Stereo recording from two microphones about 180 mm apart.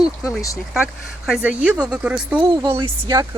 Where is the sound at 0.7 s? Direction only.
5° right (ahead or behind).